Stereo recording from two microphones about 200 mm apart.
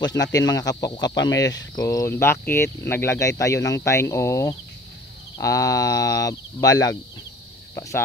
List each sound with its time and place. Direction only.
0.0 s speech: 20° left (ahead or behind)